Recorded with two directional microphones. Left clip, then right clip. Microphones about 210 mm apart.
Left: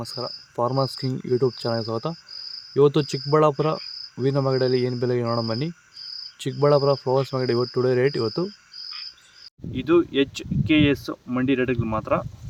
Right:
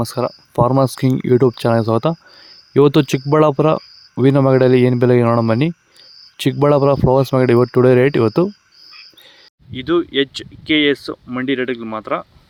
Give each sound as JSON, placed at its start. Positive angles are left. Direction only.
{"t": 0.0, "sound": "speech", "side_deg": -50}
{"t": 9.7, "sound": "speech", "side_deg": -5}